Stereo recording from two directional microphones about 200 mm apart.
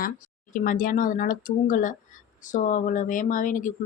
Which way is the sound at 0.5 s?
45° left (ahead or behind).